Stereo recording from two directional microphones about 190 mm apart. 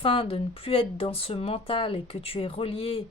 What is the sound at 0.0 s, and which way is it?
Speech, 30° left (ahead or behind).